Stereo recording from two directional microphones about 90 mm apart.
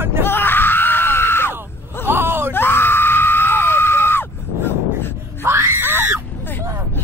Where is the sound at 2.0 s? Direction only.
25° right (ahead or behind).